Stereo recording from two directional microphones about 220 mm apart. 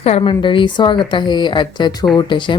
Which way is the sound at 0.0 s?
25° left (ahead or behind).